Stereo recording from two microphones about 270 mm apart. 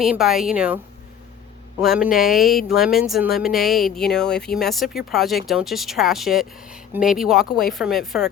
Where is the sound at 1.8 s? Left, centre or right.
Centre.